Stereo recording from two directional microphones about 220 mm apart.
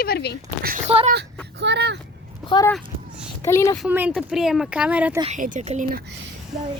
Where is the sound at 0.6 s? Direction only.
40° right (ahead or behind).